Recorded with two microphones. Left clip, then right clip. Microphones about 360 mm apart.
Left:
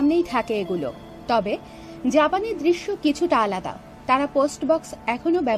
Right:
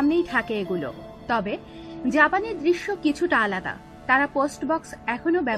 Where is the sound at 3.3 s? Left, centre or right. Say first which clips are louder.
Left 1 dB; left.